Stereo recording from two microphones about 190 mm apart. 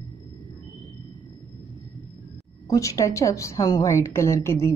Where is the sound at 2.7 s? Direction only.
15° left (ahead or behind).